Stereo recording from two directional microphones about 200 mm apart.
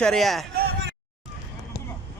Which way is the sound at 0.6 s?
60° right (ahead or behind).